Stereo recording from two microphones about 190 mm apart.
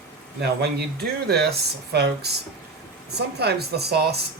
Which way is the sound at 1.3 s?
55° right (ahead or behind).